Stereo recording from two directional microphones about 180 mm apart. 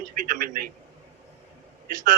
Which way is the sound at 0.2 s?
50° right (ahead or behind).